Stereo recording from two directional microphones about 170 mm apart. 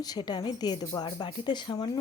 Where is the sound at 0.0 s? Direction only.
25° left (ahead or behind).